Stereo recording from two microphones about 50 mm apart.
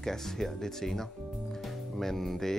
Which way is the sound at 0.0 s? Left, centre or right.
Centre.